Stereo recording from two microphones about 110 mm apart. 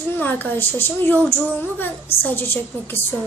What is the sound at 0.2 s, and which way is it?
A child's voice, 15° left (ahead or behind).